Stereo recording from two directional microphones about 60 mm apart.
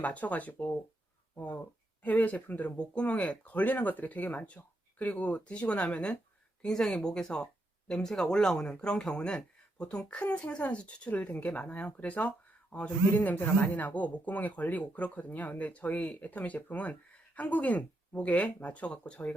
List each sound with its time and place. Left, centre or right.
0.0 s speech: left